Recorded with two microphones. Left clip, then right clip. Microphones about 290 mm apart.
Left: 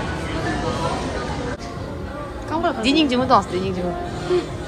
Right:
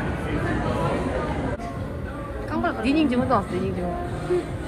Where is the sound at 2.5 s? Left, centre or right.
Left.